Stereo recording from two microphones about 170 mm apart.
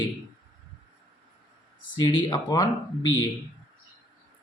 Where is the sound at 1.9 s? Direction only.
25° left (ahead or behind).